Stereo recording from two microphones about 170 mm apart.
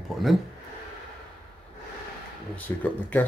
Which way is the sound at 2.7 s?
15° left (ahead or behind).